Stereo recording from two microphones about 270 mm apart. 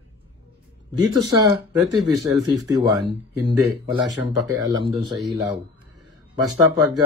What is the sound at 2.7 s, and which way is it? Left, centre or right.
Speech, centre.